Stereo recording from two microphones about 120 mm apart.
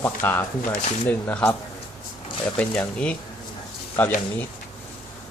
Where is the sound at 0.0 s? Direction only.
15° left (ahead or behind).